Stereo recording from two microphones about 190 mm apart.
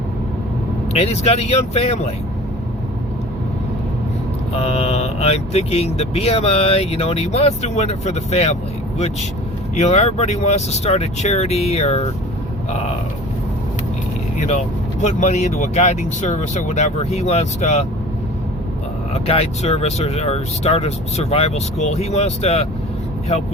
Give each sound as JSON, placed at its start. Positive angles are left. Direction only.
{"t": 0.9, "sound": "speech", "side_deg": 35}
{"t": 4.5, "sound": "speech", "side_deg": 35}
{"t": 9.7, "sound": "speech", "side_deg": 35}
{"t": 14.3, "sound": "speech", "side_deg": 35}
{"t": 19.1, "sound": "speech", "side_deg": 35}